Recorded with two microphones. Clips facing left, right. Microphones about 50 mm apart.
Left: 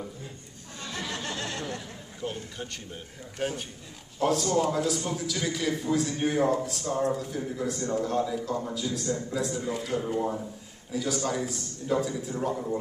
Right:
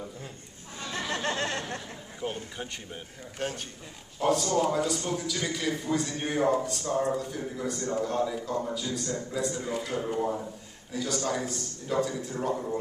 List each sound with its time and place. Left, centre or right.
0.9 s chatter: right
2.2 s a sound: centre
3.3 s a man's voice: centre